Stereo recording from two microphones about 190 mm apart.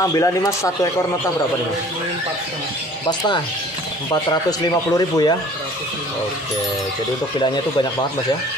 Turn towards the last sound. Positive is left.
turn(degrees=25)  # may be behind; listen again after turning